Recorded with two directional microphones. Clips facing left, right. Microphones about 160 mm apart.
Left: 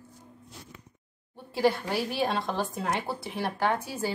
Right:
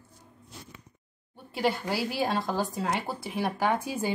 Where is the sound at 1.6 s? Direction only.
5° right (ahead or behind).